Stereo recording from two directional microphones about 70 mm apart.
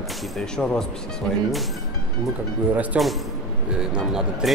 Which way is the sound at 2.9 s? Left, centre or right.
Centre.